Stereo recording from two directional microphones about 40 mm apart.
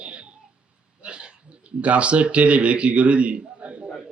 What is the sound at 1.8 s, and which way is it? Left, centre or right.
A man's voice, right.